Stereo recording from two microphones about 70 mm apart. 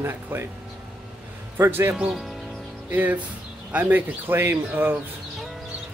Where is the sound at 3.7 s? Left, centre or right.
Right.